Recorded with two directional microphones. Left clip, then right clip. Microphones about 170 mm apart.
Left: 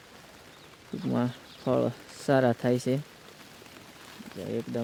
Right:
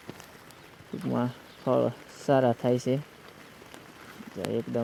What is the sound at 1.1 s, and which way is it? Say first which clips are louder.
Speech: even; 25° left (ahead or behind).